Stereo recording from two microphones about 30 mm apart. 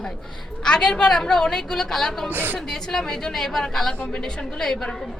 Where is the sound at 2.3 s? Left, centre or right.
Right.